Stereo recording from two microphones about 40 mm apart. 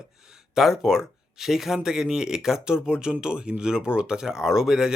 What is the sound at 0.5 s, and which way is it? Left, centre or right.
Speech, centre.